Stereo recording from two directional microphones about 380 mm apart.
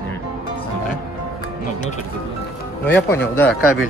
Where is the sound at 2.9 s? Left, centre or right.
Centre.